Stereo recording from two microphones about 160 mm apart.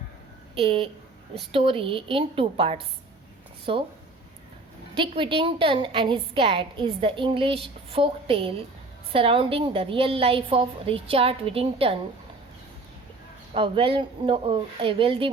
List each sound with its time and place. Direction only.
0.5 s a woman's voice: 35° right (ahead or behind)
4.9 s a woman's voice: 35° right (ahead or behind)
13.5 s a woman's voice: 35° right (ahead or behind)